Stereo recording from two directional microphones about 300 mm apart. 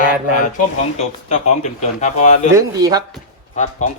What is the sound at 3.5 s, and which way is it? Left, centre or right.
Speech, left.